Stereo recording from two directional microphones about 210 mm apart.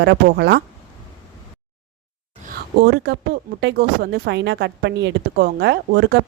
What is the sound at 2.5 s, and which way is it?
Speech, 50° right (ahead or behind).